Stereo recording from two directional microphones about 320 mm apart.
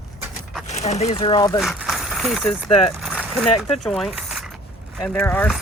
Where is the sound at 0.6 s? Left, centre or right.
Left.